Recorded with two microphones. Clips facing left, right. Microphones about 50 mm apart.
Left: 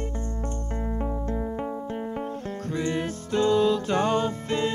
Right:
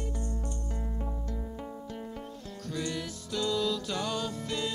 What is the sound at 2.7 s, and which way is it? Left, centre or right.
Music, left.